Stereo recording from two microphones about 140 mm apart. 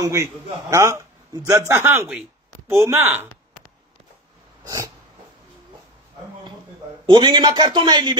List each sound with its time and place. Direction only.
0.0 s a man's voice: 20° right (ahead or behind)
4.6 s snort: 25° right (ahead or behind)
7.1 s a man's voice: 35° right (ahead or behind)